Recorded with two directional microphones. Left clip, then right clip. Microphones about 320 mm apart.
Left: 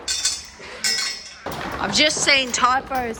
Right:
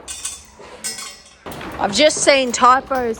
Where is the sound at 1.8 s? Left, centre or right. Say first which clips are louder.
Right 4 dB; centre.